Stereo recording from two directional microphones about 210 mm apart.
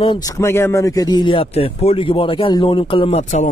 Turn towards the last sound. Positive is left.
turn(degrees=35)  # may be behind; listen again after turning